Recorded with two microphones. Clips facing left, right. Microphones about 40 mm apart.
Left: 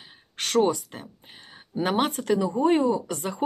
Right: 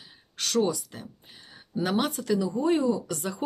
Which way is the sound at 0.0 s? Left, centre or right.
Left.